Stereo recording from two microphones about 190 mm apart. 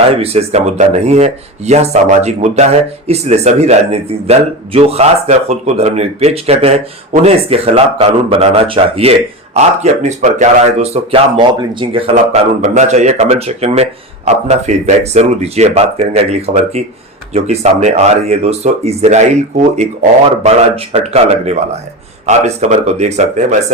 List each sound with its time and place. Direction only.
0.1 s speech: 30° right (ahead or behind)
12.1 s speech: 40° right (ahead or behind)